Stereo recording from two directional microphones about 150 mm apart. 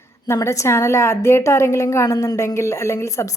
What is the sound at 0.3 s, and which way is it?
A woman's voice, 20° left (ahead or behind).